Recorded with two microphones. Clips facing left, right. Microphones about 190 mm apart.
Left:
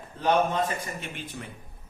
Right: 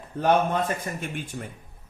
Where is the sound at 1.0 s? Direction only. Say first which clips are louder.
Right 4 dB; 50° right (ahead or behind).